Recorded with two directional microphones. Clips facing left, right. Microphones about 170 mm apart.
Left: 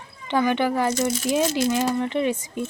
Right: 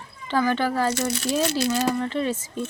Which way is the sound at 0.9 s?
70° right (ahead or behind).